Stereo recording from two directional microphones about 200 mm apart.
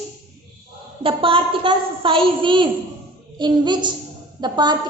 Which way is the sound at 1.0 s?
25° right (ahead or behind).